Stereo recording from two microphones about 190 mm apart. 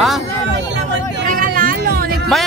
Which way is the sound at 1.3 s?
45° right (ahead or behind).